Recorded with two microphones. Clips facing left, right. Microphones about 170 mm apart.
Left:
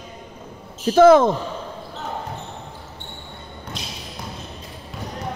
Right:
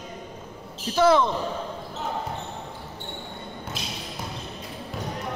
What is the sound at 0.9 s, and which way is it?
Speech, 50° left (ahead or behind).